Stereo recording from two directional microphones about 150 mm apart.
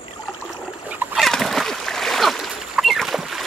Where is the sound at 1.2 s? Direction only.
Centre (ahead or behind).